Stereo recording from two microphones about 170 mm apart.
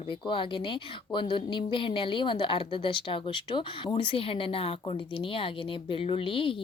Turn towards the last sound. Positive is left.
turn(degrees=30)  # may be behind; listen again after turning